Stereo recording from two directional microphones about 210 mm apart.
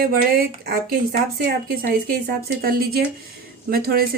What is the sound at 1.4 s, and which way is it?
Speech, 45° right (ahead or behind).